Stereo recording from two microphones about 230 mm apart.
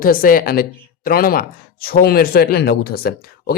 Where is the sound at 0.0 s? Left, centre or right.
Left.